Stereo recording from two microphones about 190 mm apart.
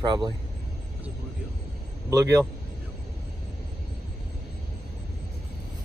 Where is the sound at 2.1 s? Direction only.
20° right (ahead or behind).